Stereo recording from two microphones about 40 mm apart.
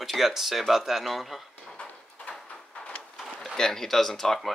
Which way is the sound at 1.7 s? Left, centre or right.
Left.